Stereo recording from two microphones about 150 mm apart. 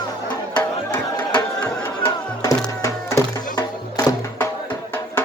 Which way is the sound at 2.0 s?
20° left (ahead or behind).